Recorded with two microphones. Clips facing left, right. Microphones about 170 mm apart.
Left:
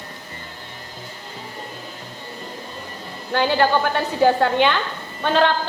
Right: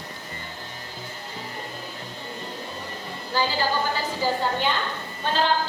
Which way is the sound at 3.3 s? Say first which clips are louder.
Left 7 dB; 65° left (ahead or behind).